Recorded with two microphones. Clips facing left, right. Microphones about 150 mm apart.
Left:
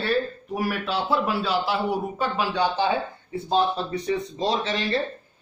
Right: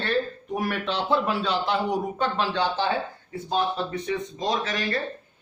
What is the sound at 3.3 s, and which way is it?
Speech, 30° left (ahead or behind).